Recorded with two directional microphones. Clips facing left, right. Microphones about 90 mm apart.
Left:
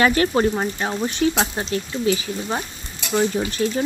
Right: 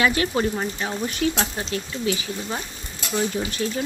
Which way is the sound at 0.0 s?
40° left (ahead or behind).